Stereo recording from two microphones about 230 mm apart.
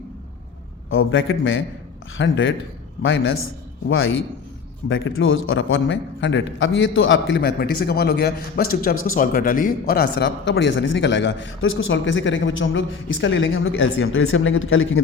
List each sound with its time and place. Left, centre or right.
0.9 s a man's voice: left